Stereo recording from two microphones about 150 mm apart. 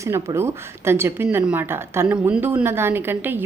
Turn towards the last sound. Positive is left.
turn(degrees=-15)  # may be behind; listen again after turning